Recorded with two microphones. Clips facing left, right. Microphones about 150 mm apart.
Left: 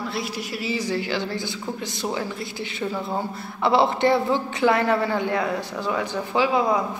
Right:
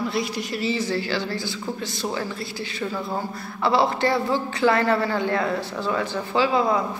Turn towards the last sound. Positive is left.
turn(degrees=15)  # may be behind; listen again after turning